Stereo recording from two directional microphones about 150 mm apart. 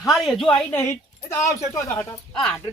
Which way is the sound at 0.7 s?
15° left (ahead or behind).